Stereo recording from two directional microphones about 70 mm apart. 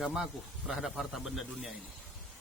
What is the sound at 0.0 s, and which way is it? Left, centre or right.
Speech, centre.